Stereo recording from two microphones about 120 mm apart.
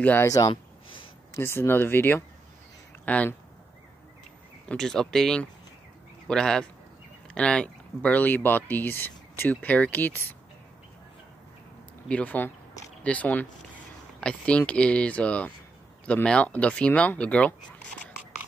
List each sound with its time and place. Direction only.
0.0 s speech: 15° left (ahead or behind)
0.5 s a sound: 45° left (ahead or behind)
1.3 s speech: 20° left (ahead or behind)
4.6 s speech: 5° left (ahead or behind)
12.1 s speech: 10° left (ahead or behind)